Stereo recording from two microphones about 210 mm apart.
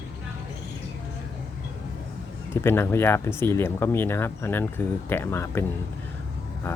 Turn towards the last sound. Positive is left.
turn(degrees=10)  # may be behind; listen again after turning